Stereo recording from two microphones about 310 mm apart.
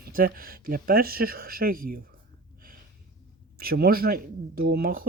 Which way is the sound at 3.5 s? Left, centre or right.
Right.